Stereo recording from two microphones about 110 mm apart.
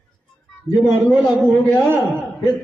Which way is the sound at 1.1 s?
Centre (ahead or behind).